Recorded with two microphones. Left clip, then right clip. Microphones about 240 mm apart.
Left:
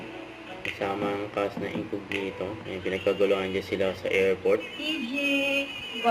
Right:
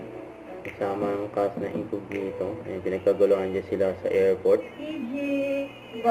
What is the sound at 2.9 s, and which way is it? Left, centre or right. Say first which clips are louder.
Speech: right 3 dB; left.